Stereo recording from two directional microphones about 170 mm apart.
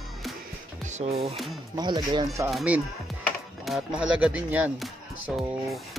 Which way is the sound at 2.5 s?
5° right (ahead or behind).